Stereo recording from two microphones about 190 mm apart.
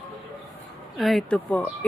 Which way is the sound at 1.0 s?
Centre (ahead or behind).